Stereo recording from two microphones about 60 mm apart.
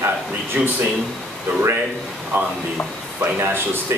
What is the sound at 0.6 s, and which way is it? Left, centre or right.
Speech, right.